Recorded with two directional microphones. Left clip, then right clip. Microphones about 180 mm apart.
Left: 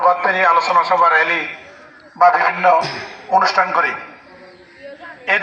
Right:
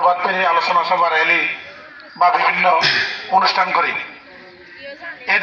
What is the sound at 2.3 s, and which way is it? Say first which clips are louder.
Speech: left 1 dB; centre (ahead or behind).